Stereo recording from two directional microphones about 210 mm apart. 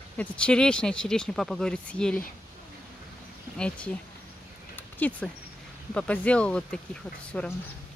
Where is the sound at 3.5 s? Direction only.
5° left (ahead or behind).